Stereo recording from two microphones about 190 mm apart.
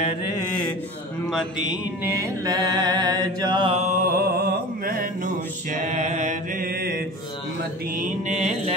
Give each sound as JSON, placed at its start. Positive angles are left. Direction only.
{"t": 1.2, "sound": "mantra", "side_deg": 0}
{"t": 2.0, "sound": "mantra", "side_deg": -15}
{"t": 4.0, "sound": "mantra", "side_deg": -55}